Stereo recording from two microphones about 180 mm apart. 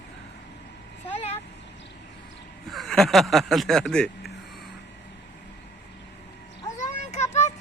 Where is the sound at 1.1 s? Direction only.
35° left (ahead or behind).